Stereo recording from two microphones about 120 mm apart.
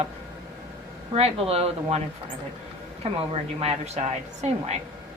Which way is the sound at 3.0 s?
60° right (ahead or behind).